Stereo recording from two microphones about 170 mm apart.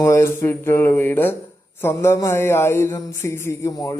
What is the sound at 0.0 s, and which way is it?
Speech, 15° left (ahead or behind).